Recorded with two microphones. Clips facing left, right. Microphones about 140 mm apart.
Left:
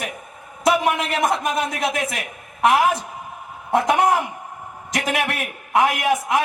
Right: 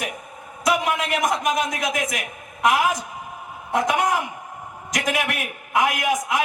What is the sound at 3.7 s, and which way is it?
A man's voice, 30° left (ahead or behind).